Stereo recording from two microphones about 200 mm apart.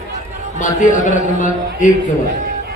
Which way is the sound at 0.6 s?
40° left (ahead or behind).